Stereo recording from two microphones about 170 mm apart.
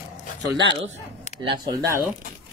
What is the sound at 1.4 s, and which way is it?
Speech, 25° right (ahead or behind).